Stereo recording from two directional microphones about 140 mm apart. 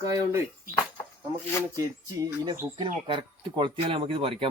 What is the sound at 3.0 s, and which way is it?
Speech, 35° right (ahead or behind).